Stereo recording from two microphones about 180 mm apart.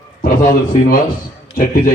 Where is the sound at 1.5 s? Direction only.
50° left (ahead or behind).